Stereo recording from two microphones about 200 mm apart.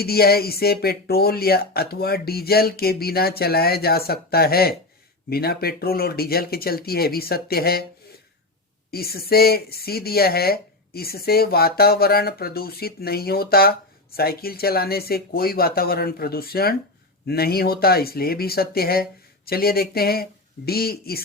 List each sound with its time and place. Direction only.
0.0 s speech: 50° left (ahead or behind)
8.9 s speech: 50° left (ahead or behind)